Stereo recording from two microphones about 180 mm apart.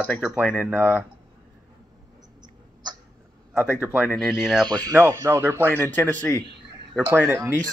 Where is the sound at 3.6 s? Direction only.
10° right (ahead or behind).